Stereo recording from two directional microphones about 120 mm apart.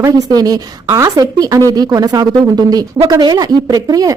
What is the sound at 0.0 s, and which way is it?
A woman's voice, 35° right (ahead or behind).